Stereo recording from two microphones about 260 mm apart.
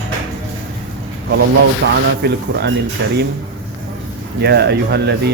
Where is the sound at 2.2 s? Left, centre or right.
Right.